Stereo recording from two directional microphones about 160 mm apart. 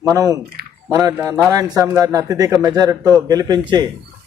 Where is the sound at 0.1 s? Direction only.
20° right (ahead or behind).